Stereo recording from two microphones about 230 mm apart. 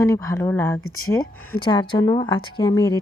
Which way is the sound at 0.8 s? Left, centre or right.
Left.